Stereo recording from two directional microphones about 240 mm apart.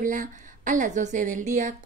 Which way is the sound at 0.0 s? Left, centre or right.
Right.